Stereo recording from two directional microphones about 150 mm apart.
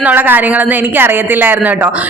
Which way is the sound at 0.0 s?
10° right (ahead or behind).